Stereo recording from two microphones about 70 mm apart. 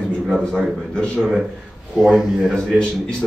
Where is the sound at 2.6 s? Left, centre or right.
Centre.